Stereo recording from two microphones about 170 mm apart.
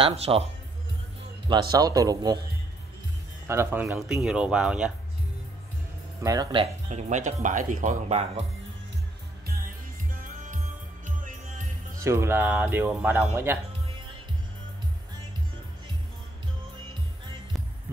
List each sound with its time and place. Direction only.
0.0 s speech: 35° right (ahead or behind)
1.5 s speech: 20° right (ahead or behind)
3.4 s speech: 15° right (ahead or behind)
6.2 s speech: 20° right (ahead or behind)
6.9 s speech: 45° right (ahead or behind)
9.5 s music: 55° right (ahead or behind)
12.0 s speech: 15° right (ahead or behind)